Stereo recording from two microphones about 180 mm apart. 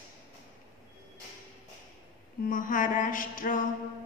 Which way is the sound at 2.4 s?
50° left (ahead or behind).